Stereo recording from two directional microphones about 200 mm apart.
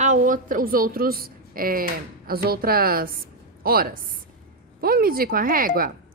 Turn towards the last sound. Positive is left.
turn(degrees=-45)  # may be behind; listen again after turning